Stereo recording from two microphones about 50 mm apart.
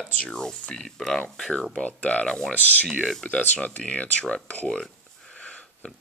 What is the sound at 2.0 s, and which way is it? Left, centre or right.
Speech, left.